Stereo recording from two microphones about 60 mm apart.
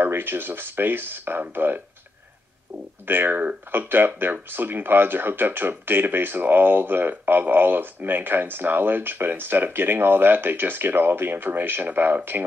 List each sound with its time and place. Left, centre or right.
0.0 s speech: right
3.1 s speech: right